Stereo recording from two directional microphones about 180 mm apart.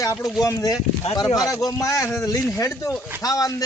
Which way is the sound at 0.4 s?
20° left (ahead or behind).